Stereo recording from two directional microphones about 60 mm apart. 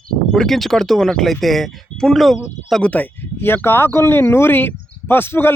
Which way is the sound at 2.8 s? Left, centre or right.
Left.